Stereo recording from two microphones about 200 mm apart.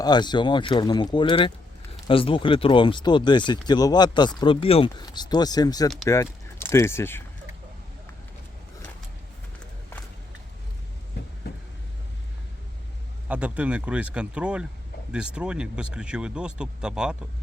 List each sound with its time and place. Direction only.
0.0 s speech: 20° left (ahead or behind)
13.2 s speech: 5° right (ahead or behind)